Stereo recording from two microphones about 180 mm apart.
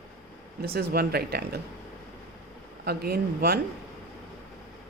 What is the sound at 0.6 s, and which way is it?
Speech, 60° right (ahead or behind).